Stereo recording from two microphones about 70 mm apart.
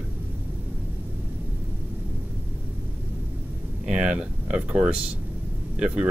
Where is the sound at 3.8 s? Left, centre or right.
Centre.